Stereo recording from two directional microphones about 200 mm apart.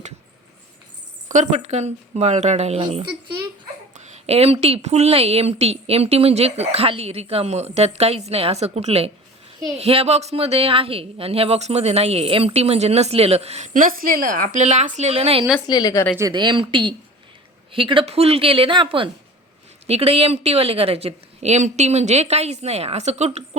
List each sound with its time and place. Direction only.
1.3 s speech: 35° right (ahead or behind)
15.6 s a woman's voice: 20° left (ahead or behind)
16.1 s a woman's voice: 20° right (ahead or behind); by 23.4 s 35° right (ahead or behind)